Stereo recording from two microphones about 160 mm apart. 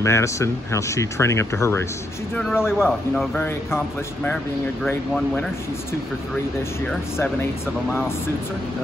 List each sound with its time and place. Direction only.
0.0 s speech: 20° left (ahead or behind)
2.6 s speech: 5° right (ahead or behind)
3.3 s speech: 10° left (ahead or behind)